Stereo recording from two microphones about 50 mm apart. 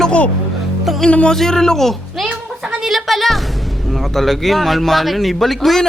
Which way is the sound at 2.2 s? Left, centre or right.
Centre.